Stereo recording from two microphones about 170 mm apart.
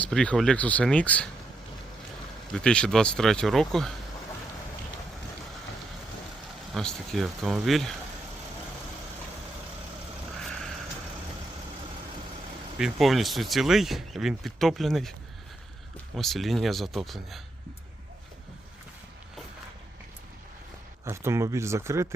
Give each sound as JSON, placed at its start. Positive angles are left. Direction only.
{"t": 0.0, "sound": "speech", "side_deg": 5}
{"t": 2.5, "sound": "speech", "side_deg": 5}
{"t": 6.7, "sound": "speech", "side_deg": 0}
{"t": 12.8, "sound": "speech", "side_deg": 0}
{"t": 16.1, "sound": "speech", "side_deg": 0}
{"t": 21.0, "sound": "speech", "side_deg": -15}